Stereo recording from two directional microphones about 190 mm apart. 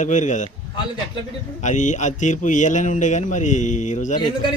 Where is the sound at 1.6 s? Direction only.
40° left (ahead or behind).